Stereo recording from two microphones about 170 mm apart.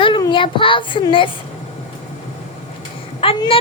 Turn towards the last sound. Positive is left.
turn(degrees=35)  # may be behind; listen again after turning